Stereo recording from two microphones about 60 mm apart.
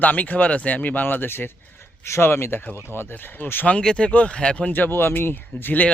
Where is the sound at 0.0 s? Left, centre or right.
Left.